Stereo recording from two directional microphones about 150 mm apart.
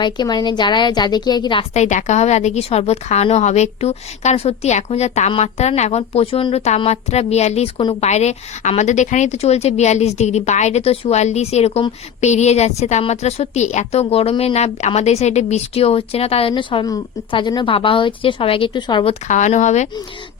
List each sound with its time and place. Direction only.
0.0 s a woman's voice: 30° left (ahead or behind)
1.7 s a woman's voice: 50° left (ahead or behind); by 19.1 s 30° left (ahead or behind)
19.3 s a woman's voice: 55° left (ahead or behind)